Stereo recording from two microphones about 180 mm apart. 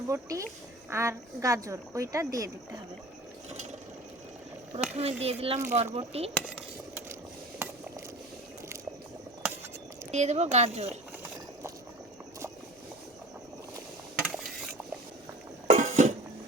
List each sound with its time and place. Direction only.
0.1 s a woman's voice: 20° right (ahead or behind)
4.9 s speech: 35° right (ahead or behind)
6.6 s a sound: 10° right (ahead or behind)
10.1 s speech: 40° right (ahead or behind)
14.2 s mechanisms: centre (ahead or behind)
15.6 s a sound: 45° right (ahead or behind)